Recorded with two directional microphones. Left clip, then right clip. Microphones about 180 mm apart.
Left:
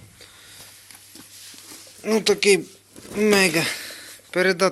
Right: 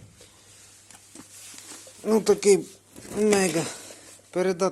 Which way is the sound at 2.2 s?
20° right (ahead or behind).